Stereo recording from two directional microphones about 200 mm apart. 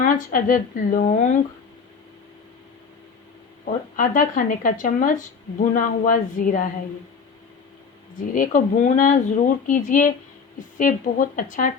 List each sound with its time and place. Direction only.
0.0 s speech: 40° left (ahead or behind)
3.7 s speech: 40° left (ahead or behind)
8.4 s speech: 40° left (ahead or behind)